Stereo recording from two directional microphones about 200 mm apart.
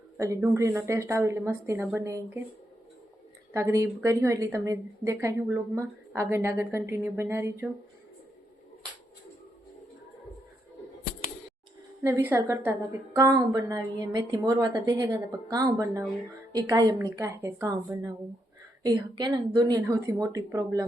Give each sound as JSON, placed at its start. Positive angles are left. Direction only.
{"t": 0.2, "sound": "a woman's voice", "side_deg": -15}
{"t": 3.5, "sound": "a woman's voice", "side_deg": -15}
{"t": 12.0, "sound": "a woman's voice", "side_deg": -10}